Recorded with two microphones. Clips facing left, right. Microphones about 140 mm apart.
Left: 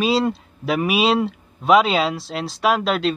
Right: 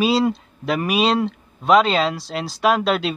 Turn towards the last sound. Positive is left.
turn(degrees=0)  # may be behind; listen again after turning